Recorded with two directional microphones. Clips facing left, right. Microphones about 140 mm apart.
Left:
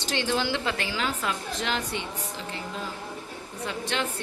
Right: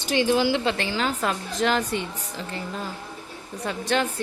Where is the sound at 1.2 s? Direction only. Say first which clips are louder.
Right 6 dB; 45° right (ahead or behind).